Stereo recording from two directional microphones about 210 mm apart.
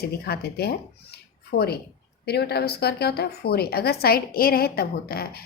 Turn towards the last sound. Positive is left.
turn(degrees=45)  # may be behind; listen again after turning